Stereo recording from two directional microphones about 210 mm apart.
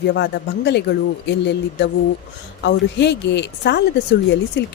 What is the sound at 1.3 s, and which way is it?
Speech, 55° left (ahead or behind).